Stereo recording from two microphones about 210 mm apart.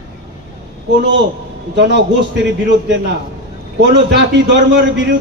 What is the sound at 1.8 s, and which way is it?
Speech, 55° right (ahead or behind).